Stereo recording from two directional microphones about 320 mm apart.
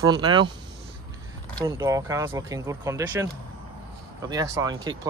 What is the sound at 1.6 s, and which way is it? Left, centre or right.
Speech, centre.